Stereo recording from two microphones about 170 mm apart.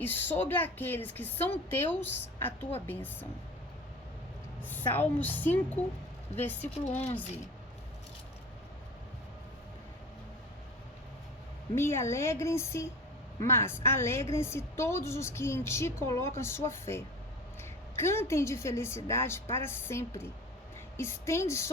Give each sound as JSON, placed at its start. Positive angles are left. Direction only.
{"t": 0.0, "sound": "a woman's voice", "side_deg": 10}
{"t": 4.7, "sound": "a woman's voice", "side_deg": 10}
{"t": 11.7, "sound": "a woman's voice", "side_deg": 15}